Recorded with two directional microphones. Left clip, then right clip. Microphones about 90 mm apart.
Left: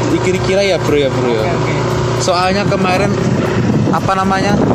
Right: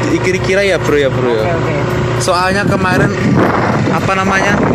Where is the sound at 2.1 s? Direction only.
30° right (ahead or behind).